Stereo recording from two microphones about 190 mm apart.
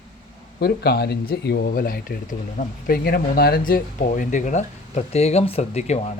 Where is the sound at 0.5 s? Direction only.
55° left (ahead or behind).